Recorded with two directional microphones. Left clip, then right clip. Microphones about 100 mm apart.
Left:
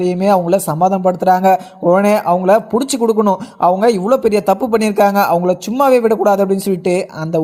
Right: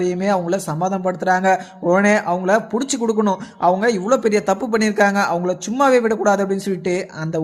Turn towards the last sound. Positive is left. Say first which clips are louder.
# left 6 dB
turn(degrees=45)  # may be behind; listen again after turning